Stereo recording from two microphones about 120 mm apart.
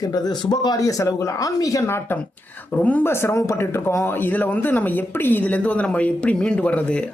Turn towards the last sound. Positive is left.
turn(degrees=10)  # may be behind; listen again after turning